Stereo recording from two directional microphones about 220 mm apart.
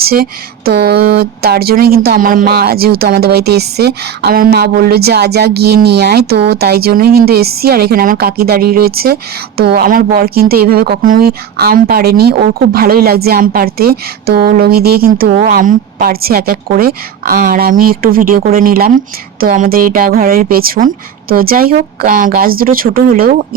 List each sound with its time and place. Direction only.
0.0 s speech: 45° right (ahead or behind)